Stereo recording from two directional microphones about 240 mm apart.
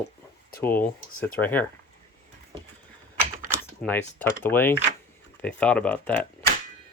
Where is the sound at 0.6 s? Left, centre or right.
Centre.